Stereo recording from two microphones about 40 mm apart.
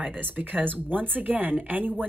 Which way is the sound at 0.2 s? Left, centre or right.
Right.